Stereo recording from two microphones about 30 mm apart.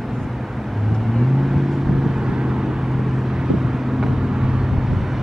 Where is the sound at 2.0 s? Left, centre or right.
Right.